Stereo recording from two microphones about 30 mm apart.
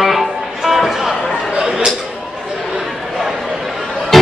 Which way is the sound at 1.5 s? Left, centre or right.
Right.